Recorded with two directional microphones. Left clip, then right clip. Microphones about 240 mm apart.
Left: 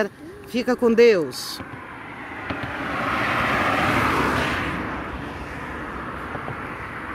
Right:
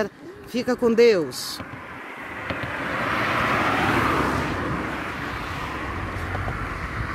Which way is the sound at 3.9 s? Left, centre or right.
Left.